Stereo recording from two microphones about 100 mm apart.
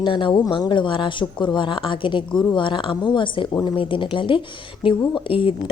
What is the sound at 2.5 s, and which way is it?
A woman's voice, 55° left (ahead or behind).